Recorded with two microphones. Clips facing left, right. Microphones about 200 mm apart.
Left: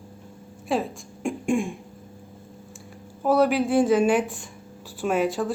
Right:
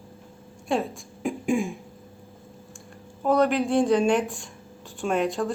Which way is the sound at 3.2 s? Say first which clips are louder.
Left 1 dB; 5° left (ahead or behind).